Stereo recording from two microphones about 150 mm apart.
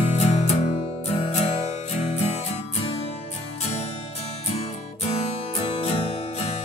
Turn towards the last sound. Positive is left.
turn(degrees=45)  # may be behind; listen again after turning